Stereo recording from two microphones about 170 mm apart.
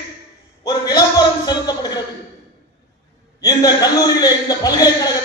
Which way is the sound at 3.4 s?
20° left (ahead or behind).